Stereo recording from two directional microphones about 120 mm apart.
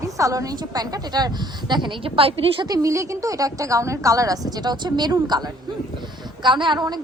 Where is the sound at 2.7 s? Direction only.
25° right (ahead or behind).